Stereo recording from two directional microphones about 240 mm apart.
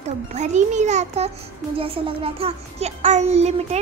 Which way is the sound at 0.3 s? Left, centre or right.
Right.